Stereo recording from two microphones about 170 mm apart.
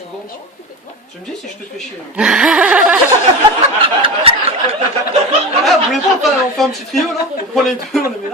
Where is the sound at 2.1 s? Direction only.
5° right (ahead or behind).